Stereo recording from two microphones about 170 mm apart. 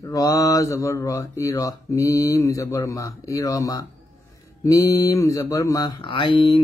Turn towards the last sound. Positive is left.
turn(degrees=30)  # may be behind; listen again after turning